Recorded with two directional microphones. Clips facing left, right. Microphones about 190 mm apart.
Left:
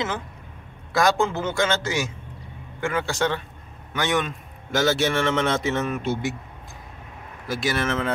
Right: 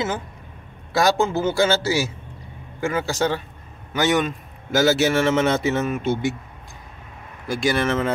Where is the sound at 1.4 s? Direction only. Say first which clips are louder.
Right 4 dB; 35° right (ahead or behind).